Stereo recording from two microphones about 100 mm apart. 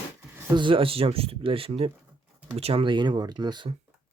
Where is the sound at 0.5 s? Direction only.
55° right (ahead or behind); by 2.8 s 80° right.